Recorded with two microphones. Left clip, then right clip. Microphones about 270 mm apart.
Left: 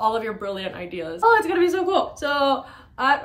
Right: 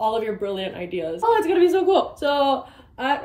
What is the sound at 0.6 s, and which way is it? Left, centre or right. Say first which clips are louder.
Speech: right 3 dB; centre.